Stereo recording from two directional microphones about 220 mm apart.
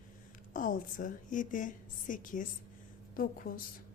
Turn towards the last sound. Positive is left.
turn(degrees=40)  # may be behind; listen again after turning